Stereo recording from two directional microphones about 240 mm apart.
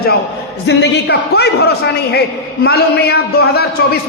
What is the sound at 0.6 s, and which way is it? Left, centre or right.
A man's voice, left.